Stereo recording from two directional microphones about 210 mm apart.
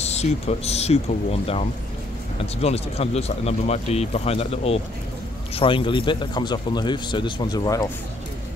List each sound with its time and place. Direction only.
0.0 s speech: 30° left (ahead or behind)